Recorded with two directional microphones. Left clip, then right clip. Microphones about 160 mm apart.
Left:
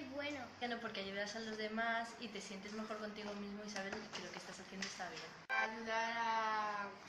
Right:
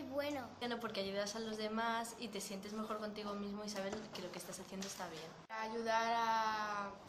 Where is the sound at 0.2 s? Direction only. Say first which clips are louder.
Right 2 dB; 20° right (ahead or behind).